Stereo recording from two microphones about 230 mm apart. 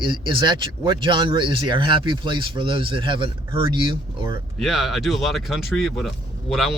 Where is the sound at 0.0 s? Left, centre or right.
Right.